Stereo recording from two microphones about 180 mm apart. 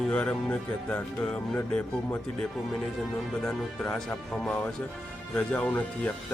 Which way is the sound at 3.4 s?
5° left (ahead or behind).